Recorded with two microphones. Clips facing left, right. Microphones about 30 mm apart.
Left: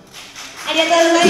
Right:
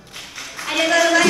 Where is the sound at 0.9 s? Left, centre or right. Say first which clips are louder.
Left 3 dB; left.